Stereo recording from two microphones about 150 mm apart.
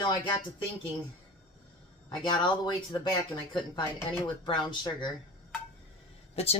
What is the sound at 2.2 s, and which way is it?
A woman's voice, 30° left (ahead or behind).